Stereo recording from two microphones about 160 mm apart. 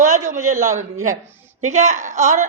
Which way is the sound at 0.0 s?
50° right (ahead or behind).